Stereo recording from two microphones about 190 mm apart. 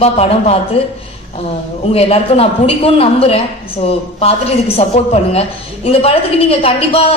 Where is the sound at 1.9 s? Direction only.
30° left (ahead or behind).